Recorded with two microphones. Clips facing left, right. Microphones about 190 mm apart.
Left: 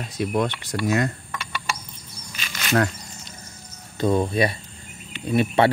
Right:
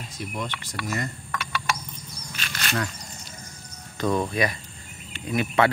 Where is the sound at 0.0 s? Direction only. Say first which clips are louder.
Left 10 dB; 70° left (ahead or behind).